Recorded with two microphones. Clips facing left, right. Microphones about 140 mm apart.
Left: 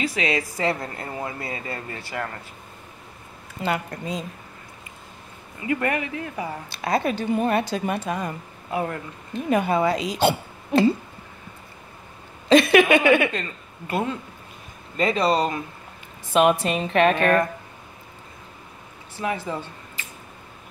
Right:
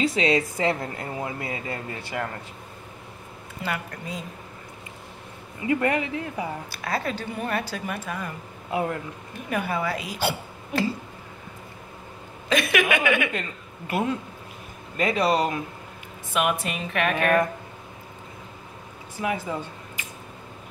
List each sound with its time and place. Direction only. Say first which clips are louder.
0.0 s a man's voice: right 3 dB; 30° right (ahead or behind)
0.6 s speech: even; 15° right (ahead or behind)
3.6 s a woman's voice: left 5 dB; 25° left (ahead or behind)
5.7 s a man's voice: right 1 dB; 20° right (ahead or behind)
6.7 s a woman's voice: left 5 dB; 20° left (ahead or behind)
9.3 s speech: left 7 dB; 25° left (ahead or behind)
12.4 s speech: left 8 dB; 30° left (ahead or behind)
13.3 s speech: left 1 dB; 10° right (ahead or behind)
16.6 s a woman's voice: left 7 dB; 30° left (ahead or behind)
19.2 s speech: left 1 dB; 10° right (ahead or behind)
20.0 s a sound: even; 15° right (ahead or behind)